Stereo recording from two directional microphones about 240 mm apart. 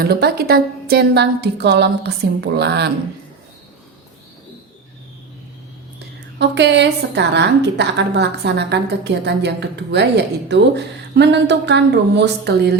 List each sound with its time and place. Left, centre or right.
0.0 s a woman's voice: right
6.0 s a woman's voice: right